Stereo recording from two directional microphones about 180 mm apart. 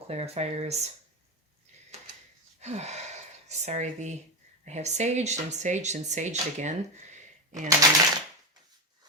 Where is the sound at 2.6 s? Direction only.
35° right (ahead or behind).